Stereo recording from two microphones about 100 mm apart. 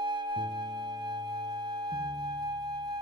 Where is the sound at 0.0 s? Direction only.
45° right (ahead or behind).